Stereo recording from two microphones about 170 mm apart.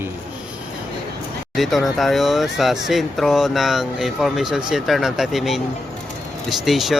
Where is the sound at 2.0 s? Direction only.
Centre (ahead or behind).